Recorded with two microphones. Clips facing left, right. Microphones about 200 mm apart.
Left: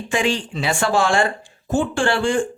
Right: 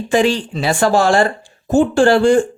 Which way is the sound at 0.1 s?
35° right (ahead or behind).